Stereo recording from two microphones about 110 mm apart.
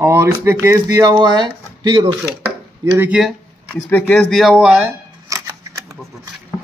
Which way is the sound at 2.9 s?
15° right (ahead or behind).